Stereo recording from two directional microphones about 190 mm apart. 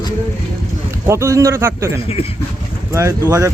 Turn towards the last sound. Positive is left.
turn(degrees=-15)  # may be behind; listen again after turning